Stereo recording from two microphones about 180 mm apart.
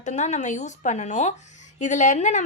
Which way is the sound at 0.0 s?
40° left (ahead or behind).